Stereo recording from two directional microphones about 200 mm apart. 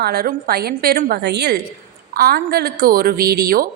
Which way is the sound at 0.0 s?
50° right (ahead or behind).